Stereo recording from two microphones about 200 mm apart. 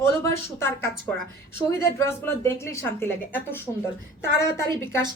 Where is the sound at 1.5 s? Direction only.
10° left (ahead or behind).